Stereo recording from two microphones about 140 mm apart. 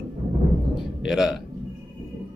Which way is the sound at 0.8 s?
5° right (ahead or behind).